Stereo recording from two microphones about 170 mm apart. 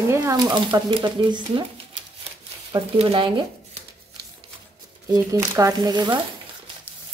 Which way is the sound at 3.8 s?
40° right (ahead or behind).